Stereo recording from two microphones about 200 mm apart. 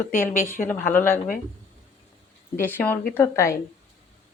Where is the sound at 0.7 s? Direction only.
10° left (ahead or behind).